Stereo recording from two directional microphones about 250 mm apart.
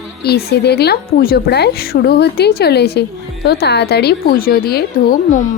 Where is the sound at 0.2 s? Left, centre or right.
Left.